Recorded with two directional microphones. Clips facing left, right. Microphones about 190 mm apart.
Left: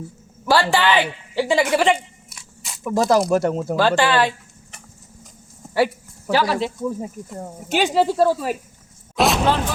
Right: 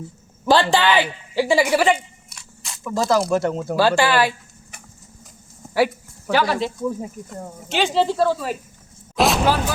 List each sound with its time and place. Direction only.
0.4 s a man's voice: 20° right (ahead or behind); by 2.9 s 5° left (ahead or behind)
2.9 s speech: 15° left (ahead or behind)
3.2 s speech: 5° left (ahead or behind)
3.8 s speech: 10° right (ahead or behind)
7.7 s speech: 15° left (ahead or behind)
9.1 s a sound: centre (ahead or behind)